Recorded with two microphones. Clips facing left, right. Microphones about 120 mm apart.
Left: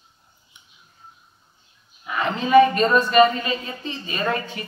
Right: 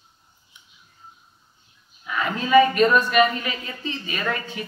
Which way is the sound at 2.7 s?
35° left (ahead or behind).